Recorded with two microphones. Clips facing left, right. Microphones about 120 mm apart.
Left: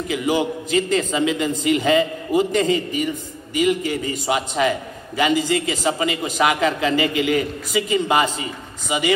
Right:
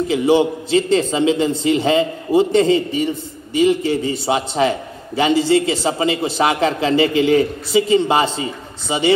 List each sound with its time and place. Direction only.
0.1 s a man's voice: 25° right (ahead or behind)